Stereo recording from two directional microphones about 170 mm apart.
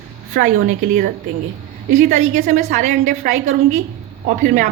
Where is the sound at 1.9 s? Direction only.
45° right (ahead or behind).